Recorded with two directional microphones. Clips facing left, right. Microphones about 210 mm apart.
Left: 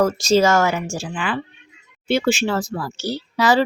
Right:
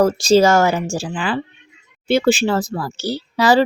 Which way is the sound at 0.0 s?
30° right (ahead or behind).